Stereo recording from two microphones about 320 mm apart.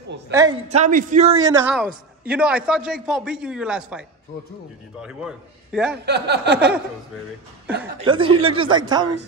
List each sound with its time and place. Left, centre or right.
0.3 s a man's voice: centre
5.0 s a man's voice: centre
5.9 s a sound: right
7.8 s a man's voice: centre